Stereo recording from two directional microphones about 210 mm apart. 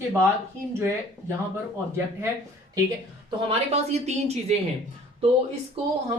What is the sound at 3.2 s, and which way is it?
Speech, 30° right (ahead or behind).